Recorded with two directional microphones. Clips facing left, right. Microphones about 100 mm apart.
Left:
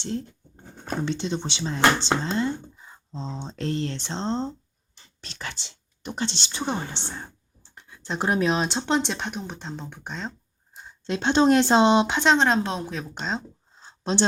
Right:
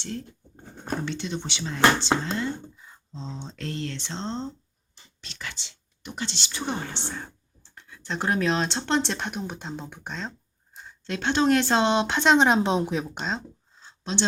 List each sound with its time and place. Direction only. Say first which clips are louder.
1.0 s speech: left 4 dB; 30° left (ahead or behind); by 10.3 s 5° left (ahead or behind)
10.8 s speech: left 3 dB; 20° left (ahead or behind)
12.0 s speech: even; centre (ahead or behind)
12.4 s a woman's voice: right 2 dB; 15° right (ahead or behind)
13.1 s speech: left 1 dB; centre (ahead or behind)
14.0 s speech: left 4 dB; 40° left (ahead or behind)